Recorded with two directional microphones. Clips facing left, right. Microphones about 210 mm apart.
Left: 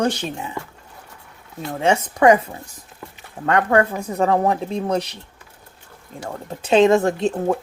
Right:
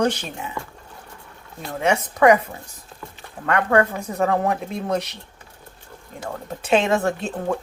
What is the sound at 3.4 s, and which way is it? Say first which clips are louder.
Speech: left 2 dB; 30° left (ahead or behind).